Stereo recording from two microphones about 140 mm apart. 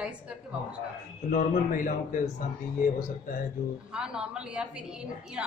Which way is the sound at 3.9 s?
5° right (ahead or behind).